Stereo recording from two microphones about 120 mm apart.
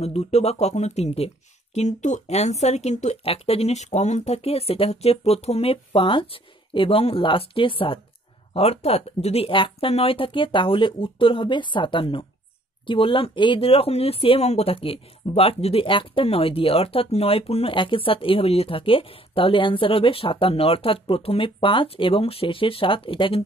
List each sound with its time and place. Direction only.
0.0 s speech: 60° left (ahead or behind)